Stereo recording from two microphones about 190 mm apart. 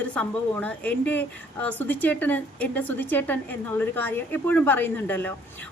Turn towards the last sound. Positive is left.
turn(degrees=10)  # may be behind; listen again after turning